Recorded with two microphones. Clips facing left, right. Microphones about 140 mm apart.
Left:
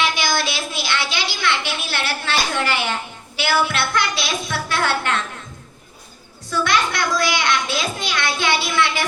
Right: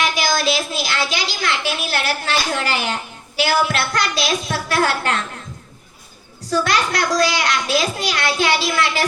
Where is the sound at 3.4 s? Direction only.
40° right (ahead or behind).